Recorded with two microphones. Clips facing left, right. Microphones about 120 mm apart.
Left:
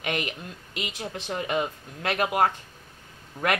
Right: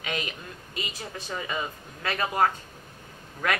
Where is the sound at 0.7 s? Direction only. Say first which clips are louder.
Left 3 dB; 70° left (ahead or behind).